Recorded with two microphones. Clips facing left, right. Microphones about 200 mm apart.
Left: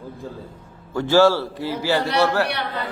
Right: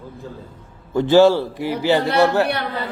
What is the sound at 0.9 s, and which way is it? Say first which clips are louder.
A man's voice: right 3 dB; 20° right (ahead or behind).